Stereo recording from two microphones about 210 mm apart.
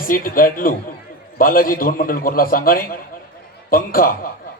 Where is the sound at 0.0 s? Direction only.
40° left (ahead or behind).